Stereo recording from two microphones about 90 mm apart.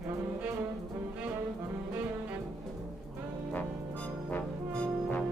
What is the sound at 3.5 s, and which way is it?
Music, 15° left (ahead or behind).